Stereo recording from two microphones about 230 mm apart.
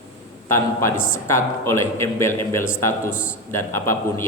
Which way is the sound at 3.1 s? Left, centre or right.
Left.